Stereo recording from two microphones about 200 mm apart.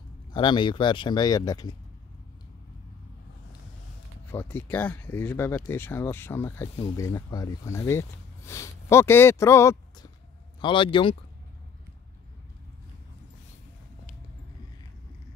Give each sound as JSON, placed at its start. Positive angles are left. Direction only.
{"t": 0.3, "sound": "speech", "side_deg": 25}
{"t": 4.3, "sound": "speech", "side_deg": 10}